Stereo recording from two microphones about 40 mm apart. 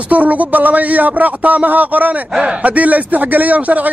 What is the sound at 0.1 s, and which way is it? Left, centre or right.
A man's voice, right.